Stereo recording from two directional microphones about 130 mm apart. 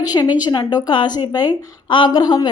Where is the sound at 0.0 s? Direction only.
30° left (ahead or behind).